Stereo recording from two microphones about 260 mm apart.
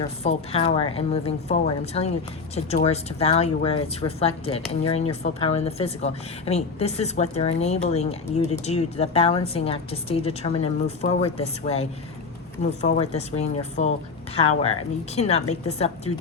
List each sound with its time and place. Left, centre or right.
0.2 s speech: left